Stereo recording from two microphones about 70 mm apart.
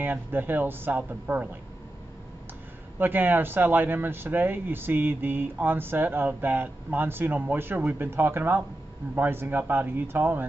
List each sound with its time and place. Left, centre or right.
0.0 s speech: right
3.0 s speech: right